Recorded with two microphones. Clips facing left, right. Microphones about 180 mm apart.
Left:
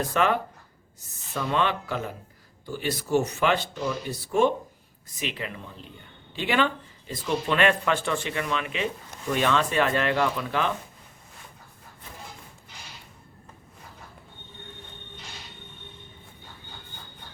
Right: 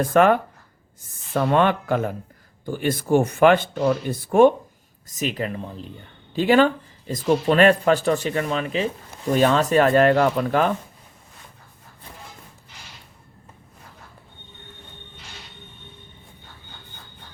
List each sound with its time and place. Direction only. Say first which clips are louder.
0.0 s speech: right 7 dB; 50° right (ahead or behind)
5.0 s speech: right 7 dB; 45° right (ahead or behind)